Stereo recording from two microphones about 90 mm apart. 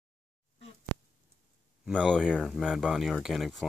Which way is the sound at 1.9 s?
5° left (ahead or behind).